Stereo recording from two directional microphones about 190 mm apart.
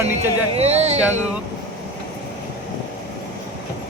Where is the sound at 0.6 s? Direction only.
35° right (ahead or behind).